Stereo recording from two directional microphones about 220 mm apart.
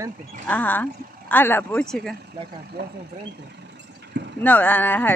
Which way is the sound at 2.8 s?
50° right (ahead or behind).